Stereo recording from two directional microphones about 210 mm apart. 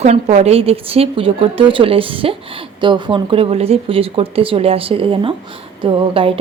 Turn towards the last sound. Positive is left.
turn(degrees=-25)  # may be behind; listen again after turning